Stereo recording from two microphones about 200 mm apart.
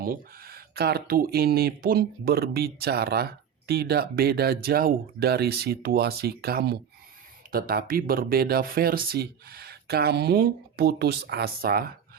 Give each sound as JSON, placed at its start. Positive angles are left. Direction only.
{"t": 0.0, "sound": "speech", "side_deg": -50}